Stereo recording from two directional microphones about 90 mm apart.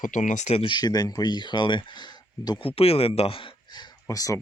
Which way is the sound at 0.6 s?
55° left (ahead or behind).